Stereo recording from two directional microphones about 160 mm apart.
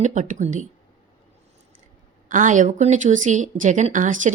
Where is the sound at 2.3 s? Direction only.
50° right (ahead or behind).